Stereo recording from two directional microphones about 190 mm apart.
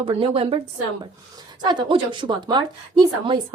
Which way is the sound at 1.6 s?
25° right (ahead or behind).